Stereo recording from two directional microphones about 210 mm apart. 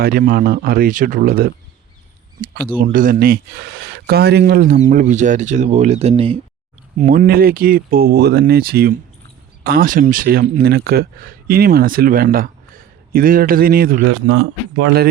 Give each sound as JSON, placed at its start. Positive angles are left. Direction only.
{"t": 0.0, "sound": "speech", "side_deg": -45}
{"t": 2.7, "sound": "speech", "side_deg": -40}
{"t": 6.9, "sound": "speech", "side_deg": -40}
{"t": 14.1, "sound": "a man's voice", "side_deg": -75}